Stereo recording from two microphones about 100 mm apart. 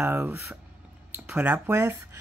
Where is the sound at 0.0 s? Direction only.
20° right (ahead or behind).